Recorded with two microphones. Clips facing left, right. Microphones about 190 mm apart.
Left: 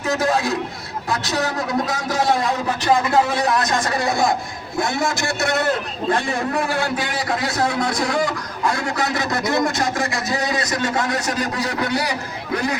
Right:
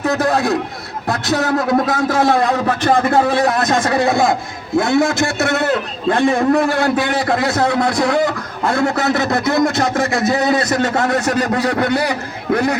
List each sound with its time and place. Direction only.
0.0 s a man's voice: 60° right (ahead or behind)